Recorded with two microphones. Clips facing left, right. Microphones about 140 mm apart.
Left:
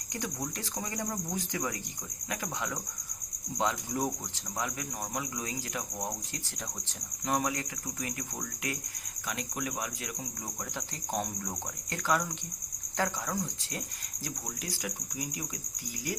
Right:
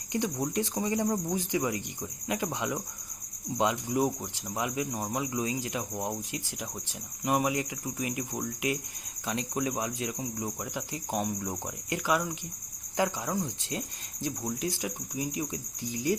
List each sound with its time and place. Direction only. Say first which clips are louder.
0.1 s speech: right 7 dB; 20° right (ahead or behind)
10.8 s speech: right 2 dB; 10° right (ahead or behind); by 15.4 s 25° right (ahead or behind)